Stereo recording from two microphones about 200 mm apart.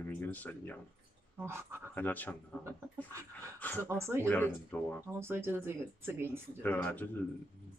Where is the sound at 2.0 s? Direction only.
10° left (ahead or behind).